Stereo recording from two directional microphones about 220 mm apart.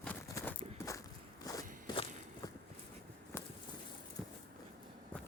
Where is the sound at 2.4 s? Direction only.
15° left (ahead or behind).